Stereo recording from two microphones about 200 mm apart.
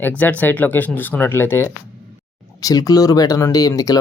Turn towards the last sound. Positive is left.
turn(degrees=15)  # may be behind; listen again after turning